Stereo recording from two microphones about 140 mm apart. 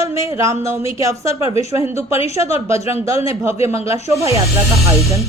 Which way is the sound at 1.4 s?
45° left (ahead or behind).